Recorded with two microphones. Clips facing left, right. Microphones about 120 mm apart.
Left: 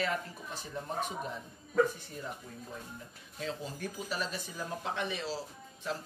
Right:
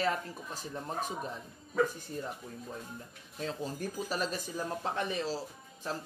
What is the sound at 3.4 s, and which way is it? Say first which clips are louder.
Speech: right 2 dB; 40° right (ahead or behind).